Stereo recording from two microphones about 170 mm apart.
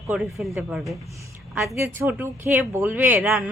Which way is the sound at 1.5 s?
15° right (ahead or behind).